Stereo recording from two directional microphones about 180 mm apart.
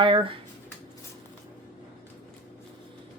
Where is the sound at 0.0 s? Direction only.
25° right (ahead or behind).